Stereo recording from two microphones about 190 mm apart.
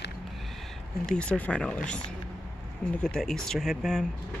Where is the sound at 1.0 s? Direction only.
5° left (ahead or behind).